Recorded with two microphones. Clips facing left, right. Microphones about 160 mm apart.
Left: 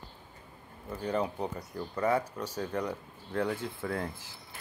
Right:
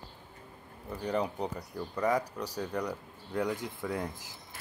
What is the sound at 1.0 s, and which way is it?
Speech, 15° right (ahead or behind).